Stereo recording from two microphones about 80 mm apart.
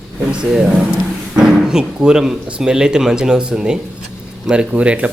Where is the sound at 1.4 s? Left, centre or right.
Centre.